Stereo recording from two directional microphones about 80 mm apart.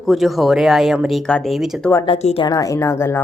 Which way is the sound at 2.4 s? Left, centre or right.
Left.